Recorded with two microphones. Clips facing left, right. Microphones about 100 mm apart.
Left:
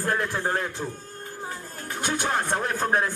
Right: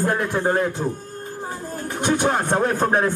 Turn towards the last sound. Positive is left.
turn(degrees=-30)  # may be behind; listen again after turning